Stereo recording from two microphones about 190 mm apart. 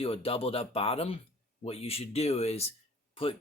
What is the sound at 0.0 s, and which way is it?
Speech, 30° left (ahead or behind).